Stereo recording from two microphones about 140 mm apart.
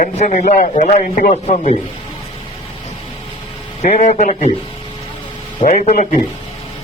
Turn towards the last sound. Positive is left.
turn(degrees=65)  # may be behind; listen again after turning